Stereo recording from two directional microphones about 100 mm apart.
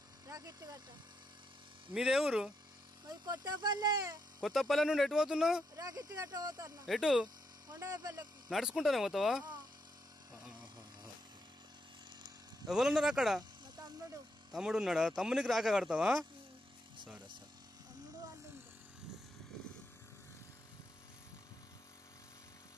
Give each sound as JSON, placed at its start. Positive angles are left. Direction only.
{"t": 0.3, "sound": "speech", "side_deg": -40}
{"t": 1.9, "sound": "speech", "side_deg": -5}
{"t": 3.1, "sound": "speech", "side_deg": -40}
{"t": 4.4, "sound": "speech", "side_deg": 0}
{"t": 5.8, "sound": "speech", "side_deg": -35}
{"t": 6.9, "sound": "speech", "side_deg": -5}
{"t": 7.6, "sound": "speech", "side_deg": -35}
{"t": 8.5, "sound": "speech", "side_deg": -5}
{"t": 9.4, "sound": "speech", "side_deg": -45}
{"t": 12.6, "sound": "speech", "side_deg": -5}
{"t": 13.4, "sound": "snake", "side_deg": -45}
{"t": 14.5, "sound": "speech", "side_deg": -5}